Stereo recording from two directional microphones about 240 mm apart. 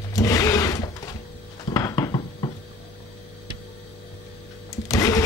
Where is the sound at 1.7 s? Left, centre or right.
Centre.